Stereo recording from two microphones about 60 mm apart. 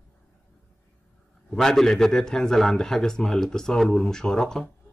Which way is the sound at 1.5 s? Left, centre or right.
Centre.